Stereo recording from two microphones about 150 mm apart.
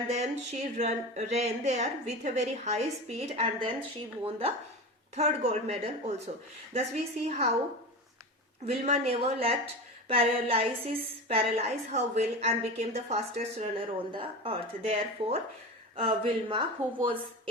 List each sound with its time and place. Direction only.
0.1 s a woman's voice: 50° right (ahead or behind)
5.1 s a woman's voice: 45° right (ahead or behind)
8.6 s a woman's voice: 45° right (ahead or behind)